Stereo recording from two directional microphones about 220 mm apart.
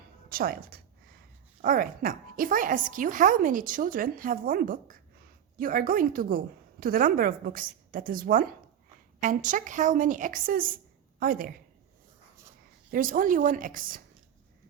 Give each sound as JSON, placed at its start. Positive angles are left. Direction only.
{"t": 0.3, "sound": "a woman's voice", "side_deg": -40}
{"t": 12.9, "sound": "a woman's voice", "side_deg": -40}